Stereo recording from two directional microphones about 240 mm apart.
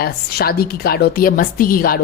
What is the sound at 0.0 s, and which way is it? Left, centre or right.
A woman's voice, left.